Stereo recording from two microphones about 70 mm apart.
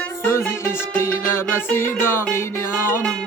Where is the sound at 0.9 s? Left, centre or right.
Left.